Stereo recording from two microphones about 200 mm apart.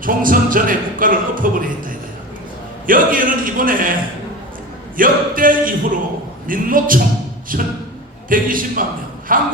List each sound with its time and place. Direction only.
0.0 s speech: 45° right (ahead or behind)
2.8 s speech: 45° right (ahead or behind)
4.9 s speech: 45° right (ahead or behind)